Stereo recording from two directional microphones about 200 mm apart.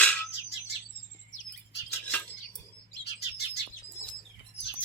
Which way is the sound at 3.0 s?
55° left (ahead or behind).